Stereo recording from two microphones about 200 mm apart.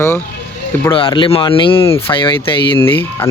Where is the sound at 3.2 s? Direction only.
10° left (ahead or behind).